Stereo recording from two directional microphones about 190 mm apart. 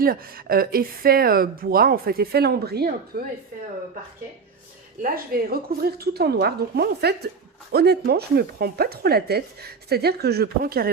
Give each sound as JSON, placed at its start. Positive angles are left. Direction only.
{"t": 0.0, "sound": "speech", "side_deg": -50}
{"t": 5.0, "sound": "speech", "side_deg": -50}